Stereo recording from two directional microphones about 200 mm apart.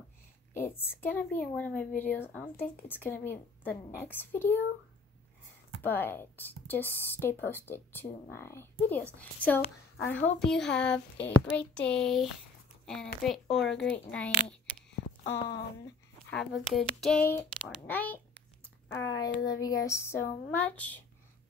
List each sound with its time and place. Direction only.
0.6 s speech: 10° left (ahead or behind)
5.8 s a woman's voice: 10° left (ahead or behind)
16.3 s a woman's voice: centre (ahead or behind)